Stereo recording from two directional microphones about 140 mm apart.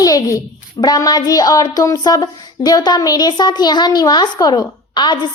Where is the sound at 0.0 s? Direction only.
25° left (ahead or behind).